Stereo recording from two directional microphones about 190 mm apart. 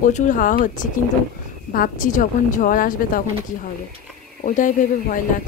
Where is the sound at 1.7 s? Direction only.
45° left (ahead or behind).